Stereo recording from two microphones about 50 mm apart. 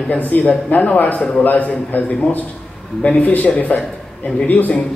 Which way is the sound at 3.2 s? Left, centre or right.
Left.